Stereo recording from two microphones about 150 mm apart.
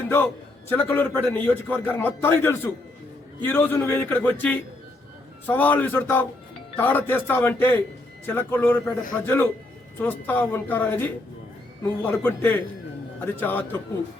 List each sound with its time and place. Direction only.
0.7 s a man's voice: 15° left (ahead or behind)